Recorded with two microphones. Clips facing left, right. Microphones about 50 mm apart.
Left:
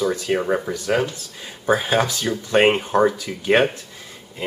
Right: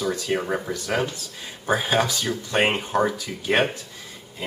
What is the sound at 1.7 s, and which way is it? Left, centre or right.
Speech, centre.